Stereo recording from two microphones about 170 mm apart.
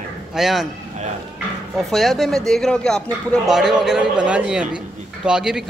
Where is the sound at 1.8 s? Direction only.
Centre (ahead or behind).